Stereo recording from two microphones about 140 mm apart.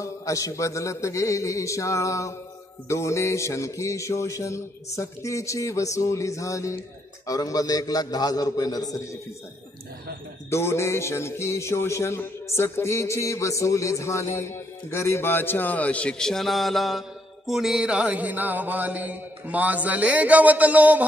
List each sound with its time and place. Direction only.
0.0 s a man's voice: 20° left (ahead or behind)
10.5 s a man's voice: 20° left (ahead or behind); by 17.0 s centre (ahead or behind)
17.5 s music: 5° right (ahead or behind)